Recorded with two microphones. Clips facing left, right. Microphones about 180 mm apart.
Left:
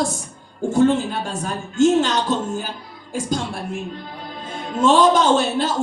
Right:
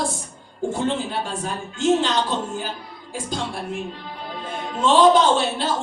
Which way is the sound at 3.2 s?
45° left (ahead or behind).